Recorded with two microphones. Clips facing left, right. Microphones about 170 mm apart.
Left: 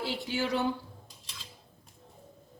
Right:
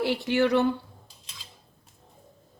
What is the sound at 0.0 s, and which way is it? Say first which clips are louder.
Speech: right 9 dB; 65° right (ahead or behind).